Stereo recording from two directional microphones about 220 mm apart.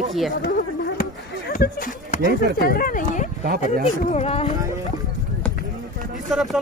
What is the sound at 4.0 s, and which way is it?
Speech, 30° left (ahead or behind).